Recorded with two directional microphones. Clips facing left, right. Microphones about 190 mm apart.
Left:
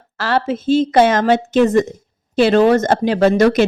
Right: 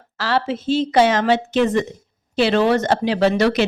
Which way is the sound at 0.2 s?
50° left (ahead or behind).